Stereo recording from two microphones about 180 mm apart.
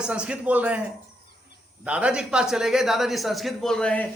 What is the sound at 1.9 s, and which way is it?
Speech, 5° right (ahead or behind).